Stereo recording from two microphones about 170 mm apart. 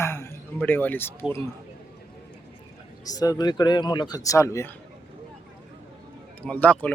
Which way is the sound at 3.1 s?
20° left (ahead or behind).